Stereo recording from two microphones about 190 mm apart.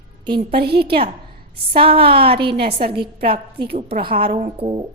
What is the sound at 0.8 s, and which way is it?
A woman's voice, 30° right (ahead or behind).